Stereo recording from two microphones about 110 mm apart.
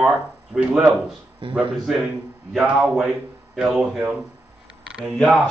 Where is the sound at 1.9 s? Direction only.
Centre (ahead or behind).